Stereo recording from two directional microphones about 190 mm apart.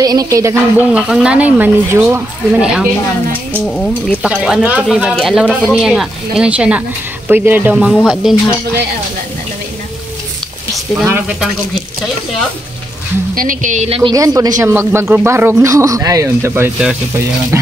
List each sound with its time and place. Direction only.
0.0 s speech: 20° right (ahead or behind); by 8.4 s centre (ahead or behind)
11.1 s speech: 10° right (ahead or behind)
13.3 s speech: 45° right (ahead or behind); by 14.1 s 30° right (ahead or behind)
14.1 s speech: 20° right (ahead or behind)